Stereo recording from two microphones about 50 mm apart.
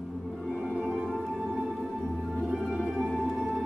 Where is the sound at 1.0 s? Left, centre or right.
Centre.